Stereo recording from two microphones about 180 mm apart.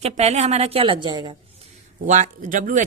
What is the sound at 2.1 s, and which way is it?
Speech, 45° right (ahead or behind).